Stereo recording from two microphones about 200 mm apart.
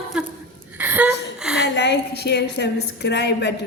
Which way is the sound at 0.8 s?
10° right (ahead or behind).